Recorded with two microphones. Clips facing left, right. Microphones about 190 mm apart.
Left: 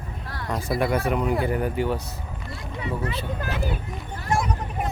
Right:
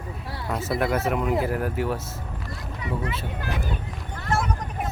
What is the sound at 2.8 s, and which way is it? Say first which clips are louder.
Speech: left 1 dB; 25° left (ahead or behind).